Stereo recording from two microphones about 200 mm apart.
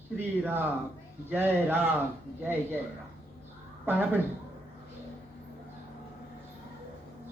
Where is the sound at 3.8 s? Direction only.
10° right (ahead or behind).